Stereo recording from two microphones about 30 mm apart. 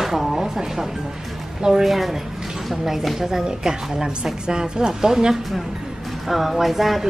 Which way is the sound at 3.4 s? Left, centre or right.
Right.